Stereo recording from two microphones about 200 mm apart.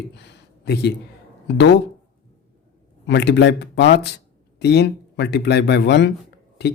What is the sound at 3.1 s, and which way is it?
Speech, 60° left (ahead or behind).